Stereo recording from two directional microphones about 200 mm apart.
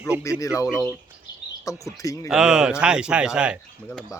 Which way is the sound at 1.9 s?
15° left (ahead or behind).